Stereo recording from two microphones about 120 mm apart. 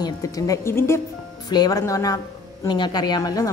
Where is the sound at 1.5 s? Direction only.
35° left (ahead or behind).